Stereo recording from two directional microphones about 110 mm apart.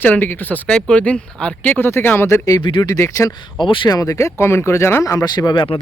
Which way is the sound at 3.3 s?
45° left (ahead or behind).